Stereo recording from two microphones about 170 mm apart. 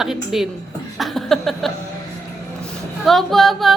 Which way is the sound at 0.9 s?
Centre (ahead or behind).